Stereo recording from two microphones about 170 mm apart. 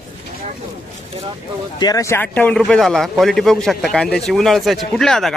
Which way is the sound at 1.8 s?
20° left (ahead or behind).